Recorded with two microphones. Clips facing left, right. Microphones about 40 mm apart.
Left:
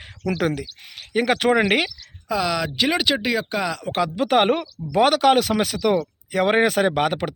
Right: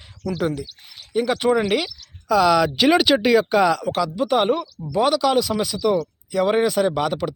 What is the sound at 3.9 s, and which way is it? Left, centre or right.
Speech, left.